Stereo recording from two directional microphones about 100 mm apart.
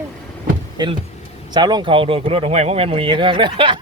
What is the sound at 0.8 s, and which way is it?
Speech, 45° right (ahead or behind).